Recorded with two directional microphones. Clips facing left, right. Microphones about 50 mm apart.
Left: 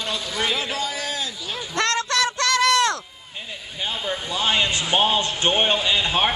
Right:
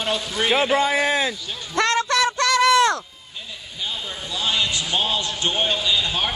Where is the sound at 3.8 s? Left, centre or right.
Left.